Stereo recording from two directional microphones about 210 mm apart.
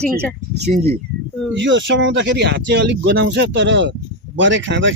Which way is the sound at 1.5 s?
60° right (ahead or behind).